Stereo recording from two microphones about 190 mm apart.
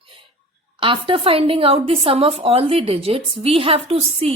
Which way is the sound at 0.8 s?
25° right (ahead or behind).